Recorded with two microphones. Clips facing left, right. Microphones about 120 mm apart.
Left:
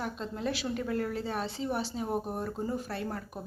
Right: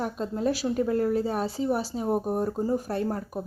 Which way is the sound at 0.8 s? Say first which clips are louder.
Right 8 dB; 25° right (ahead or behind).